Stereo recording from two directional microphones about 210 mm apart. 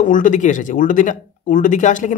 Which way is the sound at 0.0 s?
40° left (ahead or behind).